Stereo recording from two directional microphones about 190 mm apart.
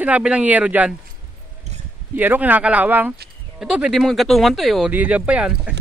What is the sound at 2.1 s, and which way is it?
Speech, 10° right (ahead or behind).